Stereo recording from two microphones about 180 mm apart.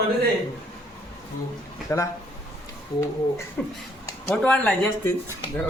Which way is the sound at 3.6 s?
5° left (ahead or behind).